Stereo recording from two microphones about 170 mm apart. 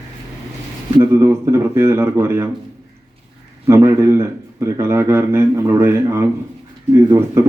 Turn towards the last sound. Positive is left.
turn(degrees=-15)  # may be behind; listen again after turning